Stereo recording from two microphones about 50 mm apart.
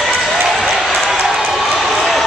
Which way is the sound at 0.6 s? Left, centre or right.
Centre.